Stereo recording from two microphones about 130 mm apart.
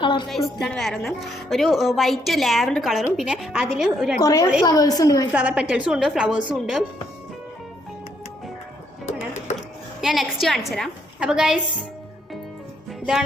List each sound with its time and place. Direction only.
0.0 s a woman's voice: 35° left (ahead or behind)
0.3 s speech: centre (ahead or behind)
4.2 s a woman's voice: 25° left (ahead or behind)
5.3 s a woman's voice: 10° right (ahead or behind)
9.0 s music: 65° left (ahead or behind)
10.0 s speech: centre (ahead or behind)